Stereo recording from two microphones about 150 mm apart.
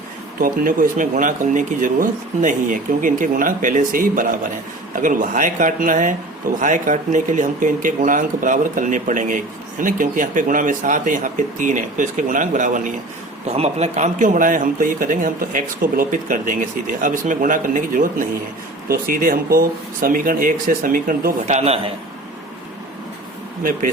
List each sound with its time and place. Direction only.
0.3 s a man's voice: 70° right (ahead or behind)
13.5 s a man's voice: 45° right (ahead or behind)